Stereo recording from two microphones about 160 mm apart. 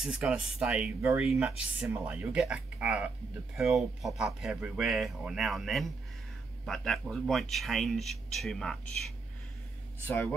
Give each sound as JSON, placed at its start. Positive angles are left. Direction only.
{"t": 0.0, "sound": "speech", "side_deg": -5}
{"t": 10.0, "sound": "speech", "side_deg": 15}